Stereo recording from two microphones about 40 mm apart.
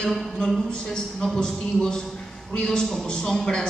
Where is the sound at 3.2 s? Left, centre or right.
Centre.